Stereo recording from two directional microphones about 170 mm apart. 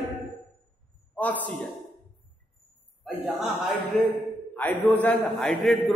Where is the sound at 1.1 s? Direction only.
10° left (ahead or behind).